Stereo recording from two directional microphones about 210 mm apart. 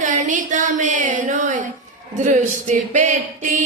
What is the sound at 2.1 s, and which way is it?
Music, 35° right (ahead or behind).